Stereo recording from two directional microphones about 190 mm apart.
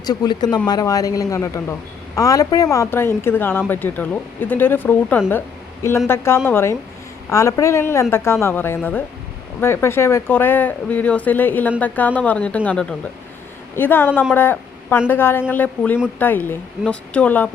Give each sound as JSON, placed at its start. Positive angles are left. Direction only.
{"t": 0.0, "sound": "speech", "side_deg": 20}